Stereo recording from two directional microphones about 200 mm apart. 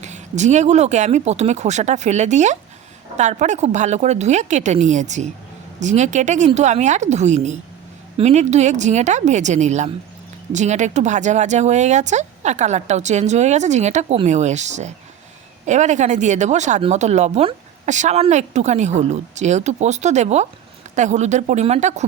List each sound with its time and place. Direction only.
0.0 s speech: 35° right (ahead or behind)